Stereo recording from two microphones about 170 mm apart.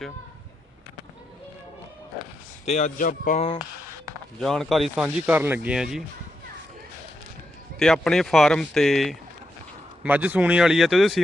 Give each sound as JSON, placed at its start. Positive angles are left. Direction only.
{"t": 2.6, "sound": "speech", "side_deg": 45}
{"t": 4.4, "sound": "speech", "side_deg": 0}
{"t": 5.0, "sound": "speech", "side_deg": -10}
{"t": 7.8, "sound": "speech", "side_deg": 5}